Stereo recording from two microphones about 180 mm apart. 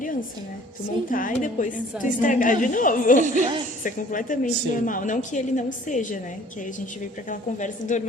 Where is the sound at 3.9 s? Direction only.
50° left (ahead or behind).